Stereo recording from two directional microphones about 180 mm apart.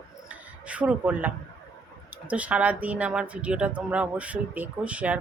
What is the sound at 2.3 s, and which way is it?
Speech, 5° right (ahead or behind).